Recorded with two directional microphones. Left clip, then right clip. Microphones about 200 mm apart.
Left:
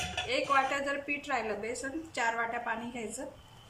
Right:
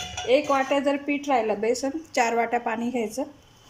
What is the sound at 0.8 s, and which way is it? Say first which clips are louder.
A woman's voice: right 9 dB; 35° right (ahead or behind).